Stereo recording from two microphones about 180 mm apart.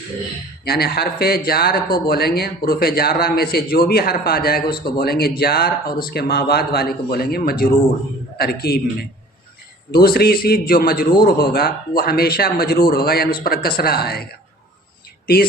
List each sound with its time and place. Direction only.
0.6 s speech: 60° left (ahead or behind)
9.9 s speech: 60° left (ahead or behind)